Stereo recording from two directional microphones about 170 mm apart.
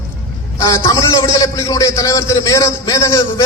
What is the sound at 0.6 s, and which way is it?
A man's voice, 20° left (ahead or behind).